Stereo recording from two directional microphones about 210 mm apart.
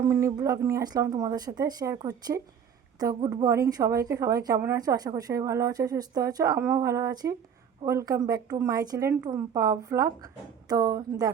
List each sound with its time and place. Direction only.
0.0 s a woman's voice: 15° right (ahead or behind)